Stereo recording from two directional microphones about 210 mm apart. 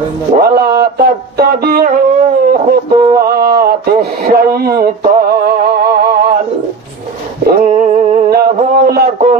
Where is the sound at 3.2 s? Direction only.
45° right (ahead or behind).